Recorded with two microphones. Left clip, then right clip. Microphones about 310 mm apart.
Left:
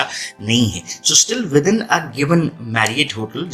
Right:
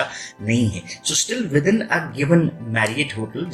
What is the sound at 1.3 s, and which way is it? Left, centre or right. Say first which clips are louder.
Speech: left 4 dB; left.